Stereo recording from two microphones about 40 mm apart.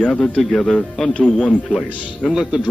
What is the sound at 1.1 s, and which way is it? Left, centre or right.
Speech, left.